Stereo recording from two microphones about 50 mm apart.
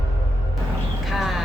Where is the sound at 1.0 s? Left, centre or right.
Centre.